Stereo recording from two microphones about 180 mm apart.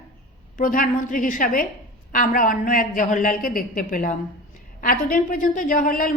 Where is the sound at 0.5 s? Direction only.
50° left (ahead or behind).